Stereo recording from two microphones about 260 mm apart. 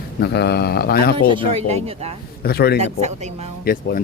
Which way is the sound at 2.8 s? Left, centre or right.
Right.